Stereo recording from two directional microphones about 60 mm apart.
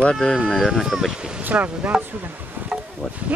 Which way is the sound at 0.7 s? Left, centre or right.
Centre.